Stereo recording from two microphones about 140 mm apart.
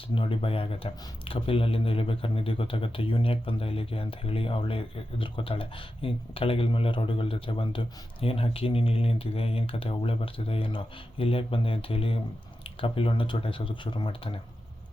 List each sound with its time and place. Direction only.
0.1 s speech: 40° left (ahead or behind)